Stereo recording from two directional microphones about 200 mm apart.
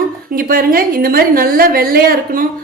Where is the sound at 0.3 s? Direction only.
45° right (ahead or behind).